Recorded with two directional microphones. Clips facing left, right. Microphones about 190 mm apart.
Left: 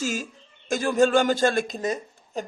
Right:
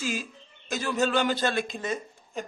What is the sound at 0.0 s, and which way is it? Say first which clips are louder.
Speech: left 3 dB; 45° left (ahead or behind).